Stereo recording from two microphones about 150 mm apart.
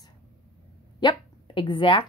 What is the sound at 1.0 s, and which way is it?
Speech, 30° left (ahead or behind).